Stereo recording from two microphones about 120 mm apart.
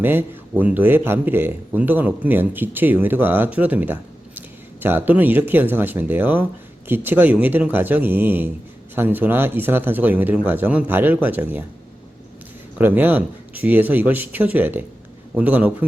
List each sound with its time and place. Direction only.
0.0 s speech: 15° right (ahead or behind)
12.8 s speech: 15° right (ahead or behind)